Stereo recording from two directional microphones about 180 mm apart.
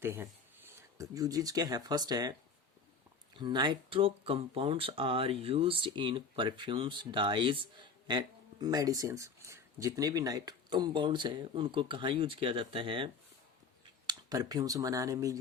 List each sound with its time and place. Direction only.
0.0 s speech: 15° right (ahead or behind)
3.3 s speech: 25° right (ahead or behind)
14.1 s speech: 20° right (ahead or behind)